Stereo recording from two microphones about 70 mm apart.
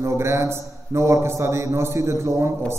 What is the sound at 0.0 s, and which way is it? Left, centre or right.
A man's voice, right.